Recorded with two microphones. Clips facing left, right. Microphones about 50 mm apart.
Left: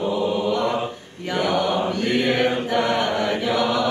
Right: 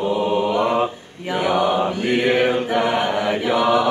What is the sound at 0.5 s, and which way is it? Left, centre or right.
Mantra, centre.